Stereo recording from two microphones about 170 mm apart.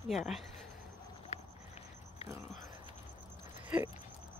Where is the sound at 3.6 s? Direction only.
10° right (ahead or behind).